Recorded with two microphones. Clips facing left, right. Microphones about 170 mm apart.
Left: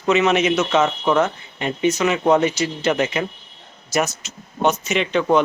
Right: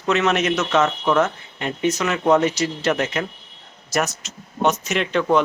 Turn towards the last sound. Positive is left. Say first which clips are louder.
# left 1 dB
turn(degrees=0)  # may be behind; listen again after turning